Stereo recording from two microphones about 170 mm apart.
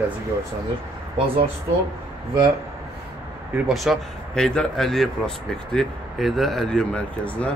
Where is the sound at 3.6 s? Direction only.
Centre (ahead or behind).